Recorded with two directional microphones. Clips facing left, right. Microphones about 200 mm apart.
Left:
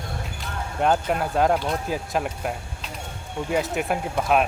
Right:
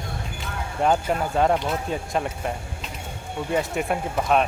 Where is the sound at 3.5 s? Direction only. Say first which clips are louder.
Even; centre (ahead or behind).